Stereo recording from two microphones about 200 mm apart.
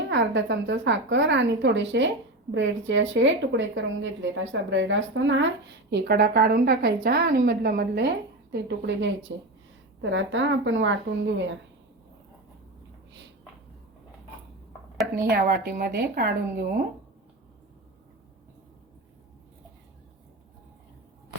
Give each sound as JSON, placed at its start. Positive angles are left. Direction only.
{"t": 0.1, "sound": "a woman's voice", "side_deg": -60}
{"t": 5.9, "sound": "a woman's voice", "side_deg": -55}
{"t": 15.3, "sound": "a woman's voice", "side_deg": -50}